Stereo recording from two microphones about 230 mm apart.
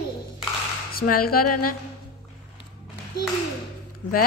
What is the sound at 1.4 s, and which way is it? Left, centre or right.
Music, left.